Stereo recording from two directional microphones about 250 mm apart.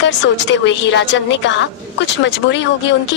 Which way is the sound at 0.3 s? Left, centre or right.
Left.